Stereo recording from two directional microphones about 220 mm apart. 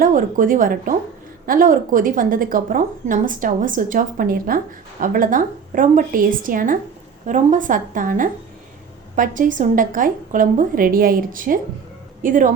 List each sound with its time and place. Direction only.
0.0 s a woman's voice: 40° right (ahead or behind)